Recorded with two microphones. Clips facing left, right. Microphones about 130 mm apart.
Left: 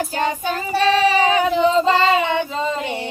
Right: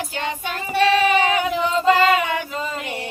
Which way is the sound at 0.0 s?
40° left (ahead or behind).